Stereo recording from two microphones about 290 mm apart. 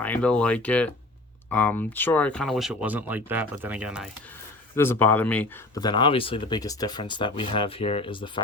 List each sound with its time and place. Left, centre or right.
0.0 s speech: centre
4.7 s speech: centre